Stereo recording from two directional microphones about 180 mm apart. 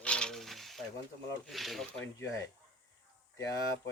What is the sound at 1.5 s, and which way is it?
Speech, centre (ahead or behind).